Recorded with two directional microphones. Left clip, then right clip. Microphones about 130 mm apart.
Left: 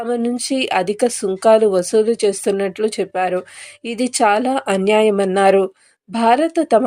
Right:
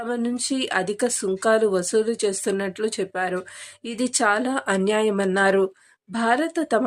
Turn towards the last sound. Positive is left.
turn(degrees=20)  # may be behind; listen again after turning